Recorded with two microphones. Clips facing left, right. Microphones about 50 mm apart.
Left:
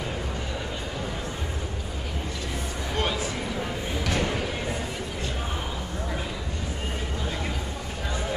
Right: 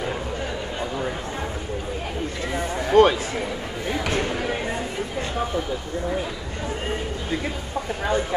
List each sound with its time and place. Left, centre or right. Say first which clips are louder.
2.9 s speech: right 14 dB; right